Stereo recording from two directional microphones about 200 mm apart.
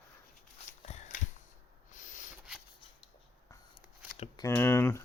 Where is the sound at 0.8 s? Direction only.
35° left (ahead or behind).